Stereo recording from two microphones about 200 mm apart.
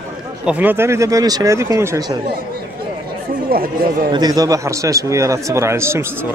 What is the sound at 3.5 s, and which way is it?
Speech, 45° right (ahead or behind).